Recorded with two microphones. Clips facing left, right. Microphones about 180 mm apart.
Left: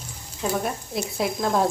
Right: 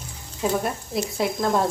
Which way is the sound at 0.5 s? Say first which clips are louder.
Even; centre (ahead or behind).